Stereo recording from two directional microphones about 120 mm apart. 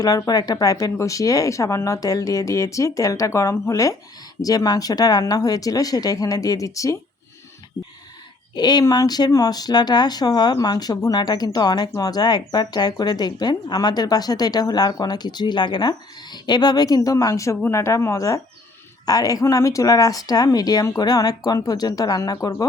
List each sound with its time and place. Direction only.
0.0 s speech: 30° left (ahead or behind)
8.5 s speech: 35° left (ahead or behind)